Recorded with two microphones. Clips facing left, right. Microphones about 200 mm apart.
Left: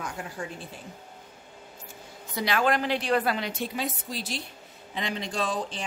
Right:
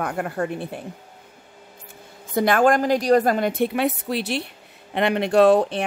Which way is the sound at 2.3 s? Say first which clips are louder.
Right 8 dB; 50° right (ahead or behind).